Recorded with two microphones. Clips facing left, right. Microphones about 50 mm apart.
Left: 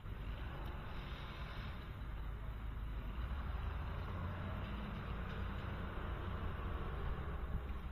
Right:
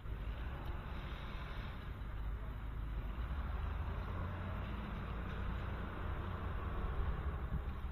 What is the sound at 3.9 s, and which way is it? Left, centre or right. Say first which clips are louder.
Vehicle: right 1 dB; right.